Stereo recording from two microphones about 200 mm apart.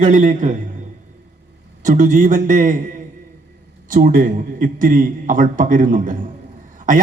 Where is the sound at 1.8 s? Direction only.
40° right (ahead or behind).